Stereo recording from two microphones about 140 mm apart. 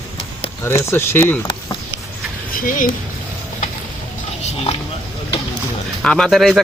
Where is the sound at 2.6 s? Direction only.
70° left (ahead or behind).